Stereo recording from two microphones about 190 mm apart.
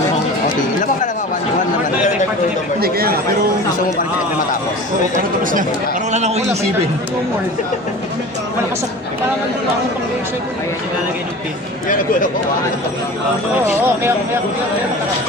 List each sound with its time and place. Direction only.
2.8 s chatter: 55° right (ahead or behind)
5.4 s a man's voice: 45° right (ahead or behind)
13.7 s speech: 10° right (ahead or behind)